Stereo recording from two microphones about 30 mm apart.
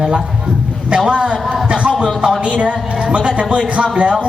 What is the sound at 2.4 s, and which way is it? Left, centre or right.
A woman's voice, right.